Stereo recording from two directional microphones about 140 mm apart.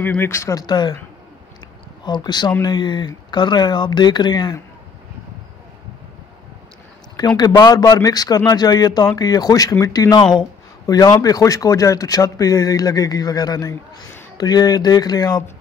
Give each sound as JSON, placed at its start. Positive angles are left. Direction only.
{"t": 0.0, "sound": "a man's voice", "side_deg": 15}
{"t": 2.0, "sound": "speech", "side_deg": 30}
{"t": 7.2, "sound": "a man's voice", "side_deg": 30}